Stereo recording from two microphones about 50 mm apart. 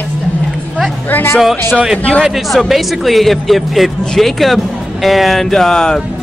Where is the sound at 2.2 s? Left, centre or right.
Centre.